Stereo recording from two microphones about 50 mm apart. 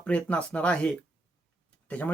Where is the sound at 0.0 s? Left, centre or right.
Left.